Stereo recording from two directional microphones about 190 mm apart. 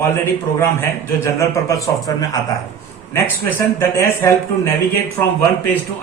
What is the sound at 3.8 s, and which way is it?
Speech, 15° left (ahead or behind).